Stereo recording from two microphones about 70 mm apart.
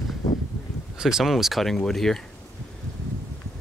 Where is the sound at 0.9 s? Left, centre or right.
Centre.